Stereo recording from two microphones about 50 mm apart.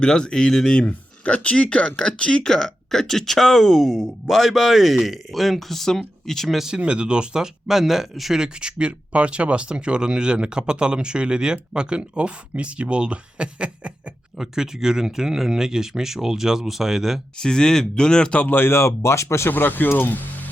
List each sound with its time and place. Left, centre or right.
0.0 s speech: centre
6.6 s speech: centre
8.4 s speech: centre
14.3 s speech: centre
17.3 s speech: centre
18.3 s speech: left
18.8 s speech: left
19.5 s speech: left